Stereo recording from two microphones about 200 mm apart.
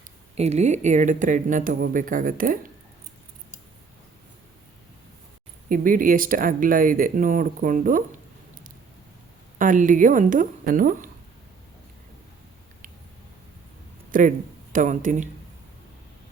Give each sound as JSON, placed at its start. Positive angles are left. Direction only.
{"t": 0.3, "sound": "speech", "side_deg": -35}
{"t": 5.6, "sound": "speech", "side_deg": -45}
{"t": 9.6, "sound": "speech", "side_deg": -40}
{"t": 14.1, "sound": "speech", "side_deg": -40}